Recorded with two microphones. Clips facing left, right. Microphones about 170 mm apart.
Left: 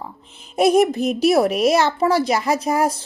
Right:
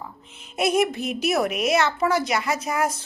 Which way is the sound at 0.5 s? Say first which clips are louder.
Left 6 dB; 35° left (ahead or behind).